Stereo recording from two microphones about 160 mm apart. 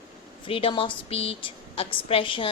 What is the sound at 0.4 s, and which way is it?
A woman's voice, 35° left (ahead or behind).